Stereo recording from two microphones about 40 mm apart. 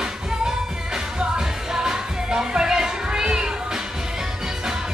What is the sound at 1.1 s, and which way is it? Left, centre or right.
Music, centre.